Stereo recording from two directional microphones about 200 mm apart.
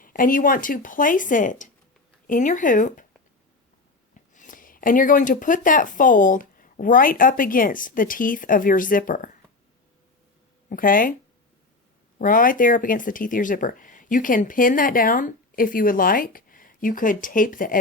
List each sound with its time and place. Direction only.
0.0 s speech: 45° left (ahead or behind)
4.1 s speech: 40° left (ahead or behind)
10.7 s speech: 45° left (ahead or behind)
12.2 s speech: 45° left (ahead or behind)